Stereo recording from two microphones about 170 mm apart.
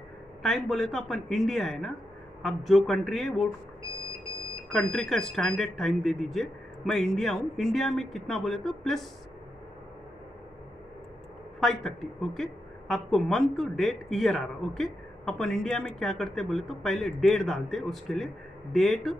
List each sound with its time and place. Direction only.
0.4 s a woman's voice: centre (ahead or behind)
4.9 s a woman's voice: 5° left (ahead or behind)
11.6 s a woman's voice: centre (ahead or behind)